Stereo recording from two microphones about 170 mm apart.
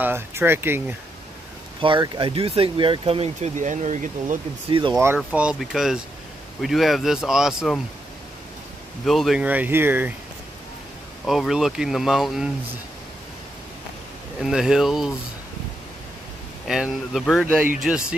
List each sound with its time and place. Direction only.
0.0 s speech: 15° right (ahead or behind)
1.8 s speech: 30° right (ahead or behind); by 4.4 s 50° right (ahead or behind)
4.6 s speech: 30° right (ahead or behind)
5.0 s speech: 10° right (ahead or behind)
9.0 s speech: centre (ahead or behind)
11.2 s speech: centre (ahead or behind)
14.4 s speech: 5° right (ahead or behind)
16.6 s speech: centre (ahead or behind)